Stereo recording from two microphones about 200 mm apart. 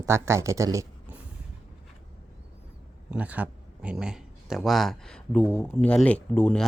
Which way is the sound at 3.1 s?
5° right (ahead or behind).